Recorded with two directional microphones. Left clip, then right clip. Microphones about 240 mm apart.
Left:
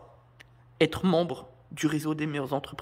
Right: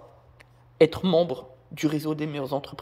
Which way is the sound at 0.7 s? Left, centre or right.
Centre.